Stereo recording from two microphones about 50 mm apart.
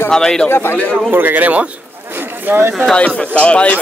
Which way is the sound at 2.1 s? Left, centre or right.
Right.